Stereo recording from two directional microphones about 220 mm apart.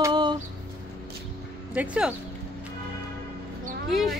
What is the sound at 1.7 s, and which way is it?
Speech, 5° right (ahead or behind).